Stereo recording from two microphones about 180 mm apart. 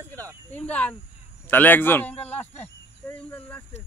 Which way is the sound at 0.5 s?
10° left (ahead or behind).